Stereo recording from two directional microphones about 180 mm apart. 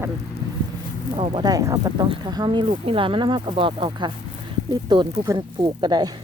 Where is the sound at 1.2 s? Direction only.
25° right (ahead or behind).